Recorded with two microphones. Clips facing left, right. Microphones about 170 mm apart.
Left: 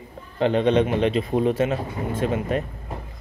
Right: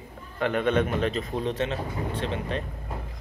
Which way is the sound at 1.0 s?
40° right (ahead or behind).